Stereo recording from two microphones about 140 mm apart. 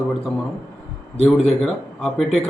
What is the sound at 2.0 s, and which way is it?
Speech, centre (ahead or behind).